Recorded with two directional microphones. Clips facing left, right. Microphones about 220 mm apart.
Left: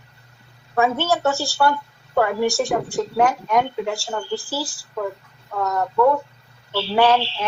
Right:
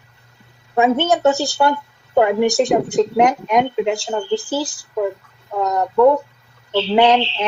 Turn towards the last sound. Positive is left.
turn(degrees=-20)  # may be behind; listen again after turning